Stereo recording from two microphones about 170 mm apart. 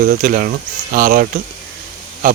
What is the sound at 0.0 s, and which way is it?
Speech, 55° right (ahead or behind).